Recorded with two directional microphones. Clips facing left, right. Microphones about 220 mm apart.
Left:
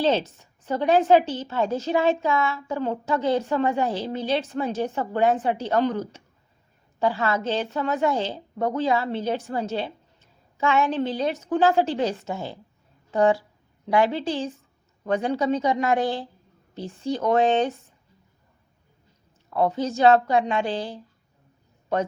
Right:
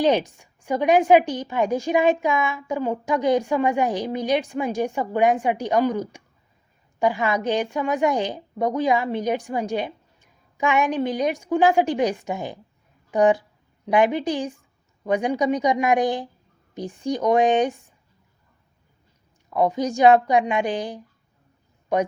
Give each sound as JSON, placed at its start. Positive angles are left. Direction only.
{"t": 0.0, "sound": "a woman's voice", "side_deg": -15}
{"t": 19.5, "sound": "a woman's voice", "side_deg": -15}